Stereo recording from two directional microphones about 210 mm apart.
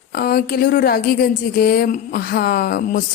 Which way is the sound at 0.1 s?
45° left (ahead or behind).